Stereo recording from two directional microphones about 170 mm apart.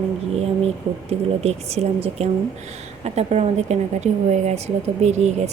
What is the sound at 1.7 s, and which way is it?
Speech, 40° right (ahead or behind).